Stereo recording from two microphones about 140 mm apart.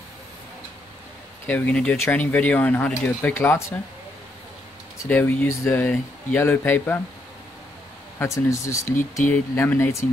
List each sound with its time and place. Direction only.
1.5 s speech: 10° left (ahead or behind)
4.9 s speech: 15° left (ahead or behind)
8.2 s speech: 20° left (ahead or behind)